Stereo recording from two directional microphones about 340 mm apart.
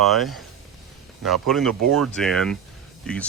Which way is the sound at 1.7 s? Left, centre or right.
Right.